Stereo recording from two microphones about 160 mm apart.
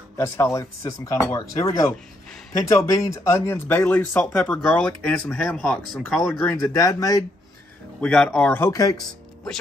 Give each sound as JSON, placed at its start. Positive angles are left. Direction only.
{"t": 0.2, "sound": "speech", "side_deg": 15}
{"t": 6.5, "sound": "speech", "side_deg": 20}
{"t": 8.0, "sound": "speech", "side_deg": 5}